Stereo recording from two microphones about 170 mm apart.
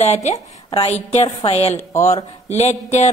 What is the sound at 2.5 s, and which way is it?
Speech, 40° left (ahead or behind).